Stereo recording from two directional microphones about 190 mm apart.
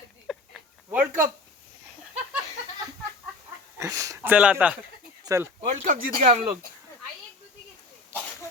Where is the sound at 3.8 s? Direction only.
15° right (ahead or behind).